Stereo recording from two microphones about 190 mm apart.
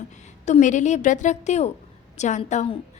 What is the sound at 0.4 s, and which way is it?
A woman's voice, 40° left (ahead or behind).